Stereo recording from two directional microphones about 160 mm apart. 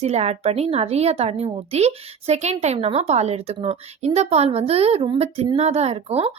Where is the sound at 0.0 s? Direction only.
40° right (ahead or behind).